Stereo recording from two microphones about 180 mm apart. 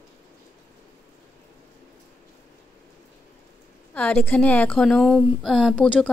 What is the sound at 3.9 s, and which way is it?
A woman's voice, 10° left (ahead or behind).